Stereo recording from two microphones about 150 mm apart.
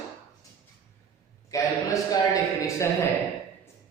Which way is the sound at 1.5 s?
20° left (ahead or behind).